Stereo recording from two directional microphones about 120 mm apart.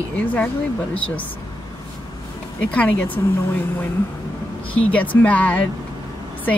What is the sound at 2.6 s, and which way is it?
Speech, 10° left (ahead or behind).